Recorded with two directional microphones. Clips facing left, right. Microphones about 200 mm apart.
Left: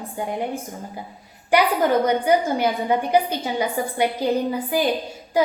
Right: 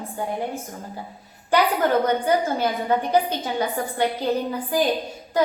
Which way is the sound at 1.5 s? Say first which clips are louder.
Left 1 dB; 10° left (ahead or behind).